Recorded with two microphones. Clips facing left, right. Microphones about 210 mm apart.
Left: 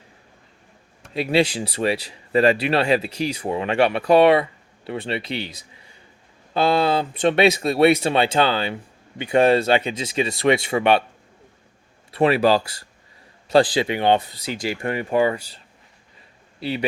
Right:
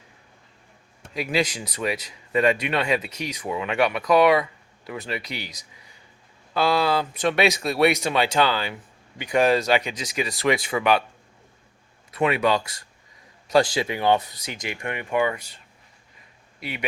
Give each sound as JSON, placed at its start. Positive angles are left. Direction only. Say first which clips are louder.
{"t": 1.1, "sound": "speech", "louder": "left 5 dB", "side_deg": 30}
{"t": 12.1, "sound": "speech", "louder": "left 4 dB", "side_deg": 35}
{"t": 16.6, "sound": "speech", "louder": "left 8 dB", "side_deg": 30}